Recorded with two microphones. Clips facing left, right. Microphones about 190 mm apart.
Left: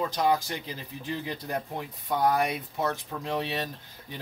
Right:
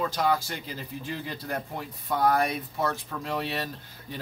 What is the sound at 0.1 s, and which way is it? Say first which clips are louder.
Speech: left 1 dB; 20° left (ahead or behind).